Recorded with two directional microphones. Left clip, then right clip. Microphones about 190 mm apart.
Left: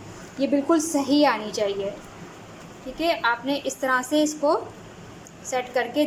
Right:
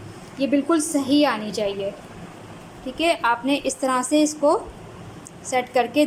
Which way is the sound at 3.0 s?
10° right (ahead or behind).